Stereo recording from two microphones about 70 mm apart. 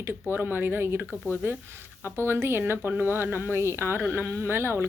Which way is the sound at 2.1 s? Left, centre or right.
Right.